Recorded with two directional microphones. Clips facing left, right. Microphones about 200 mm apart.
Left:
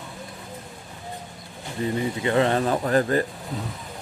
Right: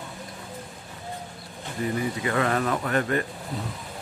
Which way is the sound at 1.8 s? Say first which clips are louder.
Left 2 dB; 25° left (ahead or behind).